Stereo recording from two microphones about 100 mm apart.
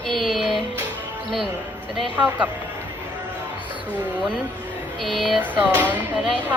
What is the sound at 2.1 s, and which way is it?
Speech, 15° right (ahead or behind).